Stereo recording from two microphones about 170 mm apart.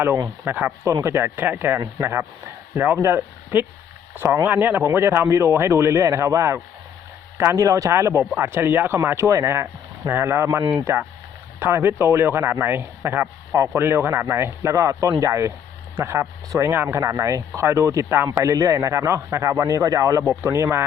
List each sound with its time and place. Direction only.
0.4 s speech: 10° right (ahead or behind)
10.6 s speech: 25° right (ahead or behind)
11.6 s speech: 15° right (ahead or behind)